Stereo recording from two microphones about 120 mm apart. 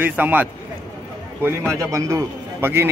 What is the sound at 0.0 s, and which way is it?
Speech, 15° right (ahead or behind).